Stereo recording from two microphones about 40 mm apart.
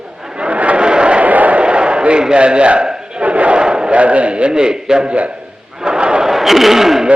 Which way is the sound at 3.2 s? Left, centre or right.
Right.